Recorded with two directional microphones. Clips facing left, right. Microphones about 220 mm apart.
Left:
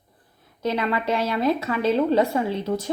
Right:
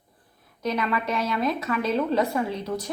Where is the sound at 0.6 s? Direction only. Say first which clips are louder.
Left 2 dB; 30° left (ahead or behind).